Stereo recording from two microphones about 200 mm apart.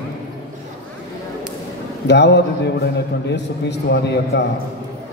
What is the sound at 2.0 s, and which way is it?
A man's voice, 60° left (ahead or behind).